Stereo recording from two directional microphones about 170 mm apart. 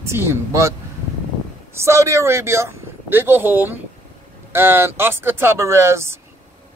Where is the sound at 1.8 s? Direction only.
15° right (ahead or behind).